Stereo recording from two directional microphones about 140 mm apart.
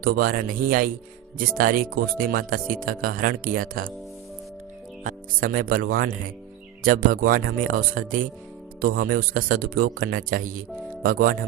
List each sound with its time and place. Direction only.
0.0 s a man's voice: 90° right
5.0 s a man's voice: 85° right
8.8 s a man's voice: 90° right